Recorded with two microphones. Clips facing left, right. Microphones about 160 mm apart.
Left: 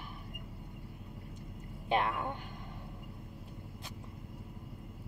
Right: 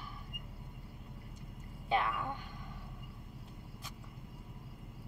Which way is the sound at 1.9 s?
20° left (ahead or behind).